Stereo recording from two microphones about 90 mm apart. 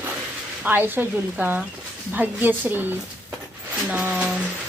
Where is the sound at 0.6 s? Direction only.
20° right (ahead or behind).